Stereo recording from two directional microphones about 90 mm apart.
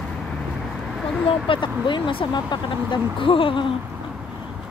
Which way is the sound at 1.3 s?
70° left (ahead or behind).